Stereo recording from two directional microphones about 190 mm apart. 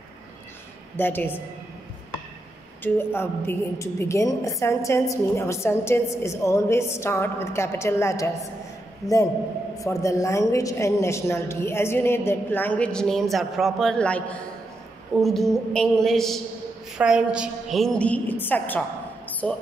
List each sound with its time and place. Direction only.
0.9 s a woman's voice: 10° left (ahead or behind)
2.8 s a woman's voice: 10° left (ahead or behind)